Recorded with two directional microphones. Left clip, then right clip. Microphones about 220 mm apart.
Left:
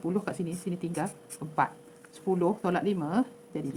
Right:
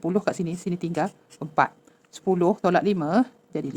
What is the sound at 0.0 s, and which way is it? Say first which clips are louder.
Speech: right 7 dB; 50° right (ahead or behind).